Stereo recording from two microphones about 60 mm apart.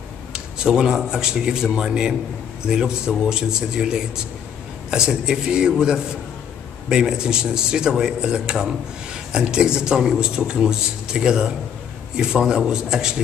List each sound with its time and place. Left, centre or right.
0.3 s a man's voice: centre